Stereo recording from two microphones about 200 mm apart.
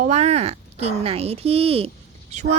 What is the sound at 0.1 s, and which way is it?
Speech, 35° right (ahead or behind).